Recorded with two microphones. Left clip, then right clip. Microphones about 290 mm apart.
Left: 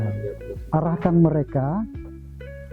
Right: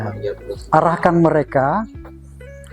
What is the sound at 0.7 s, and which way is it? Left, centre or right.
Speech, centre.